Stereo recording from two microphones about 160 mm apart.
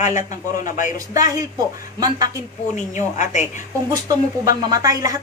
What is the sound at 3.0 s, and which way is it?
Speech, 50° left (ahead or behind).